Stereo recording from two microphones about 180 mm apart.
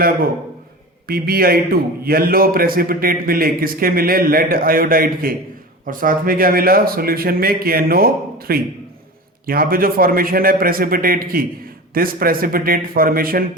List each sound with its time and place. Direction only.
1.0 s a man's voice: 55° right (ahead or behind)